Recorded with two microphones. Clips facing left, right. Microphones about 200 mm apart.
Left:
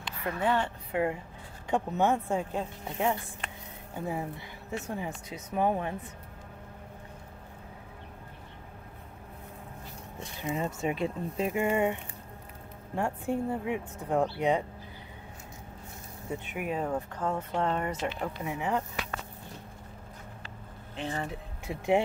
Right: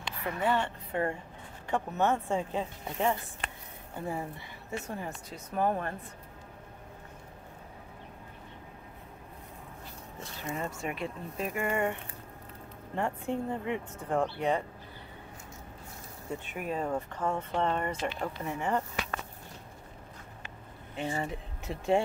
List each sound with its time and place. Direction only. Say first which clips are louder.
0.4 s speech: left 1 dB; 5° left (ahead or behind)
10.4 s speech: left 4 dB; 15° left (ahead or behind)
11.6 s speech: left 2 dB; 10° left (ahead or behind)
16.3 s speech: left 2 dB; 5° left (ahead or behind)
20.9 s speech: right 1 dB; 5° right (ahead or behind)
21.6 s speech: left 1 dB; 15° left (ahead or behind)